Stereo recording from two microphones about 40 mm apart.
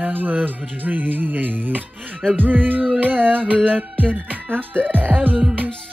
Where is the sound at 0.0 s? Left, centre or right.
Right.